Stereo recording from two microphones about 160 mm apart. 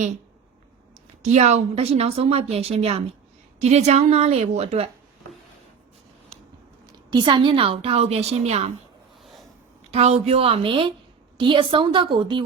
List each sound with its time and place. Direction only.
1.2 s a woman's voice: 45° right (ahead or behind)
7.1 s a woman's voice: 30° right (ahead or behind)
9.9 s a woman's voice: 40° right (ahead or behind)